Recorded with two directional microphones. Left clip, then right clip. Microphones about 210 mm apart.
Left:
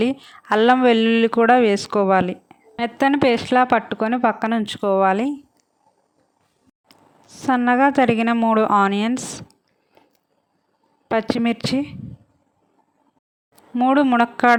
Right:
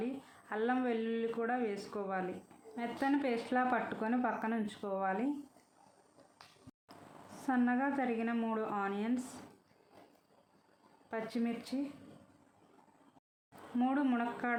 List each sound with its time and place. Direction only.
0.0 s speech: 50° left (ahead or behind)
6.8 s a woman's voice: 45° left (ahead or behind)
11.1 s speech: 50° left (ahead or behind)
13.7 s speech: 40° left (ahead or behind)